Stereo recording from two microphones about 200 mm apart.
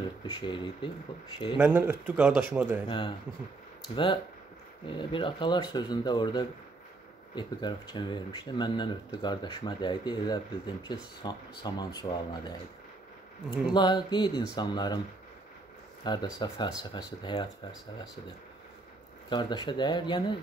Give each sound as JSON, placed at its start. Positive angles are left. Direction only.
{"t": 0.3, "sound": "speech", "side_deg": 25}
{"t": 1.6, "sound": "speech", "side_deg": -10}
{"t": 3.9, "sound": "speech", "side_deg": 25}
{"t": 13.7, "sound": "speech", "side_deg": 20}
{"t": 16.0, "sound": "speech", "side_deg": 20}
{"t": 19.2, "sound": "speech", "side_deg": 20}